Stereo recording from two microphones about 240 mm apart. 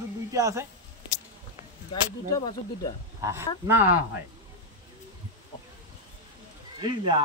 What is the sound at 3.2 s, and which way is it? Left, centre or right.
Speech, centre.